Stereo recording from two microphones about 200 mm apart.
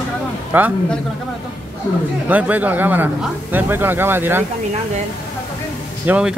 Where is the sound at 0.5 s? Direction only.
10° right (ahead or behind).